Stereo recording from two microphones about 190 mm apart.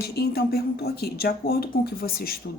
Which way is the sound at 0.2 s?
55° left (ahead or behind).